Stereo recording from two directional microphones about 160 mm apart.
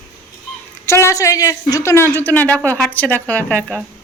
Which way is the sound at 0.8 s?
15° left (ahead or behind).